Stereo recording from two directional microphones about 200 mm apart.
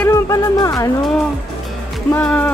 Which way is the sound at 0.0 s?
15° left (ahead or behind).